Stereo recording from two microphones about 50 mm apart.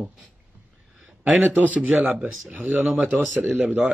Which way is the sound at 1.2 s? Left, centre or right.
Right.